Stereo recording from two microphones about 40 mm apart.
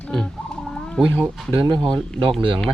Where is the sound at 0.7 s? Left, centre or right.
Centre.